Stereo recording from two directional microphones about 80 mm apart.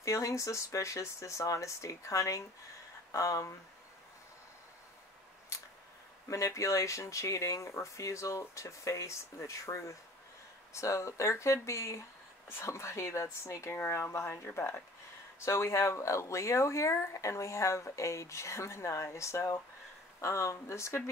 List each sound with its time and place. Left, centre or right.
0.0 s speech: left
6.2 s speech: left